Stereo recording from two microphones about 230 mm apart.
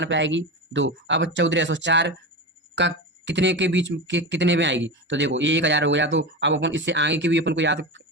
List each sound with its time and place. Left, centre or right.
0.0 s speech: right